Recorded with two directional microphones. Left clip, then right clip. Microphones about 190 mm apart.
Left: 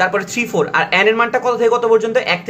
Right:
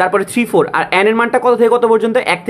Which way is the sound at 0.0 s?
35° right (ahead or behind).